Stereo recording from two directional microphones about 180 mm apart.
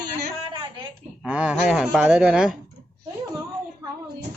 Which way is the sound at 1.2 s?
5° right (ahead or behind).